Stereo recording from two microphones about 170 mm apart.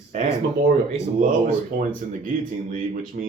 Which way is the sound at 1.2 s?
50° right (ahead or behind).